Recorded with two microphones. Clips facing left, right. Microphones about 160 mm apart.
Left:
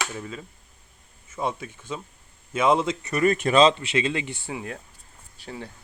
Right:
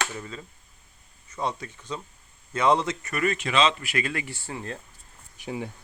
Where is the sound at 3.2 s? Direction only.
45° left (ahead or behind); by 4.8 s 10° left (ahead or behind).